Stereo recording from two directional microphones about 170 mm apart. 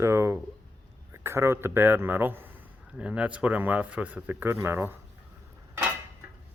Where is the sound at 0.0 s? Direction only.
15° right (ahead or behind).